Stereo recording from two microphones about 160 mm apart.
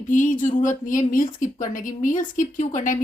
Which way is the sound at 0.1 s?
55° left (ahead or behind).